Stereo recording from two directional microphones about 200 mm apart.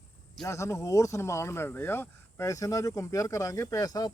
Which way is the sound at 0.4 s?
15° left (ahead or behind).